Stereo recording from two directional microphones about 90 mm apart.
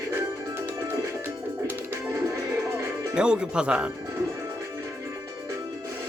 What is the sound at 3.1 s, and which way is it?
Speech, 10° right (ahead or behind).